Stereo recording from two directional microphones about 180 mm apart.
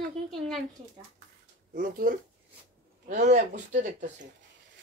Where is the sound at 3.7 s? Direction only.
45° right (ahead or behind).